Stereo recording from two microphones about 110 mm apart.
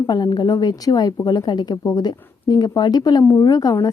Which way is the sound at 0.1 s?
40° left (ahead or behind).